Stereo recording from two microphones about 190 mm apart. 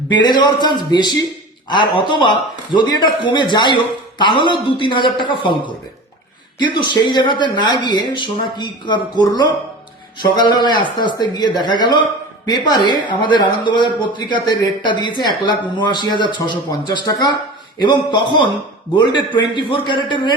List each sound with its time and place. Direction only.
0.1 s a man's voice: 25° left (ahead or behind)
10.3 s a man's voice: 25° left (ahead or behind)